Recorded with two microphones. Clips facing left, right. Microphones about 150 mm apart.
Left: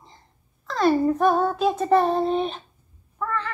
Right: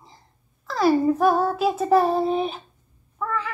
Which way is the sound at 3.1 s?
5° right (ahead or behind).